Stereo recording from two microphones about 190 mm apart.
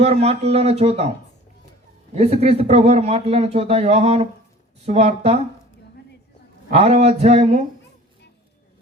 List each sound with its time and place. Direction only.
0.0 s a man's voice: 35° right (ahead or behind)
2.1 s a man's voice: 35° right (ahead or behind)
6.7 s a man's voice: 35° right (ahead or behind)